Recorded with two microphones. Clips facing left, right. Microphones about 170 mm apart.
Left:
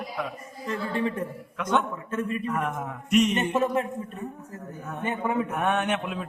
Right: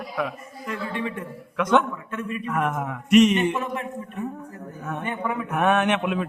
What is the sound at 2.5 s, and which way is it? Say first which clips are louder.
Speech: right 3 dB; 85° right.